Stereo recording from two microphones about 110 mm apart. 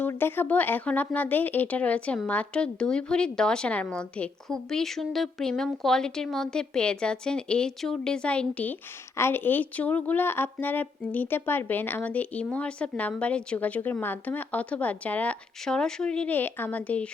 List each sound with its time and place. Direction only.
0.1 s speech: 20° left (ahead or behind)